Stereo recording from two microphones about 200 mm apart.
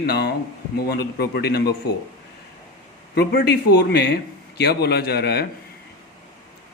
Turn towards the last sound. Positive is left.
turn(degrees=55)  # may be behind; listen again after turning